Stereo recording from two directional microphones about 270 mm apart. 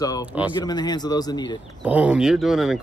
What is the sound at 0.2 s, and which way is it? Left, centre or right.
Speech, centre.